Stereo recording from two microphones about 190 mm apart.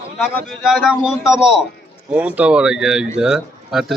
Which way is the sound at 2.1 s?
5° right (ahead or behind).